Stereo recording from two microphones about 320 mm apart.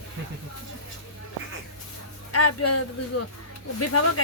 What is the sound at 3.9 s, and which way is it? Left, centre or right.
Speech, left.